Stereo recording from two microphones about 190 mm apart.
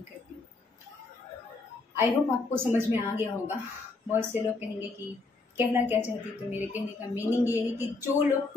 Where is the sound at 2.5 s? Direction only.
10° right (ahead or behind).